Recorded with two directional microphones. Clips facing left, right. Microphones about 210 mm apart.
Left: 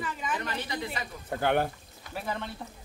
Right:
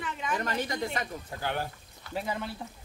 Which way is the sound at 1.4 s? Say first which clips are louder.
Left 7 dB; 60° left (ahead or behind).